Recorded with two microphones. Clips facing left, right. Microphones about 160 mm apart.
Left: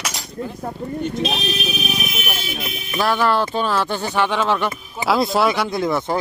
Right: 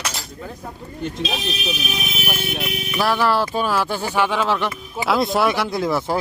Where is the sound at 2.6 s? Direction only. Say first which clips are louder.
Right 3 dB; 75° right (ahead or behind).